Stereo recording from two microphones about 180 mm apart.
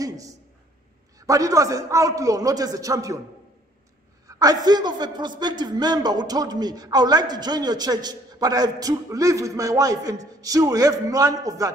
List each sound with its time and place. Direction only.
0.0 s a sound: 20° right (ahead or behind)
1.2 s speech: 20° right (ahead or behind)
4.3 s speech: 20° right (ahead or behind)